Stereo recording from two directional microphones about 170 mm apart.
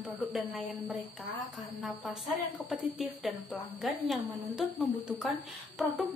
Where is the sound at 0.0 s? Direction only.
5° right (ahead or behind).